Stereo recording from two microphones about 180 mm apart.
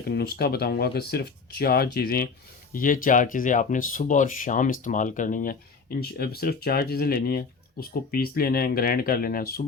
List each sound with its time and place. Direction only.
0.1 s speech: 60° left (ahead or behind)